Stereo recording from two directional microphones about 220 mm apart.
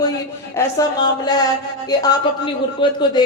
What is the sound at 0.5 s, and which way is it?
A man's voice, 15° left (ahead or behind).